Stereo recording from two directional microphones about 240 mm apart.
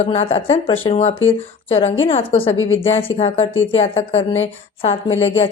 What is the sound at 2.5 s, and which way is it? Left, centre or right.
Speech, left.